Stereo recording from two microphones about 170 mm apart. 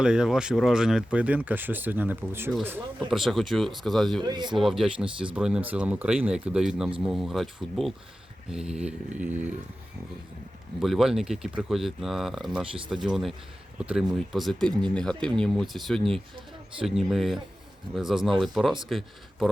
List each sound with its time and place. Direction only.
0.0 s speech: 5° right (ahead or behind)
3.1 s speech: centre (ahead or behind)
4.2 s speech: 25° right (ahead or behind)
4.5 s speech: centre (ahead or behind)
10.8 s speech: centre (ahead or behind)